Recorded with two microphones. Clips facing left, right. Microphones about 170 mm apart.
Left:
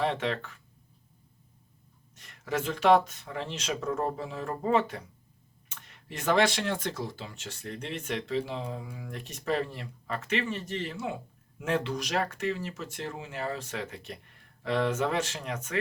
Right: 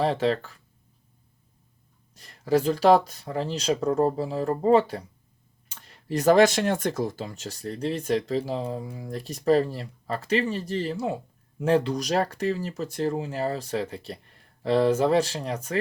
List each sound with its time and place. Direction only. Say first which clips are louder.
0.0 s speech: right 6 dB; 35° right (ahead or behind)
2.1 s speech: right 9 dB; 35° right (ahead or behind)